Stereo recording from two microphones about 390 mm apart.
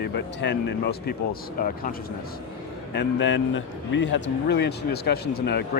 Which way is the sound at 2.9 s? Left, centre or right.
Left.